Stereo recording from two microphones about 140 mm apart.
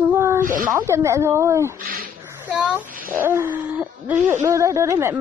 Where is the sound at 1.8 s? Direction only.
90° right.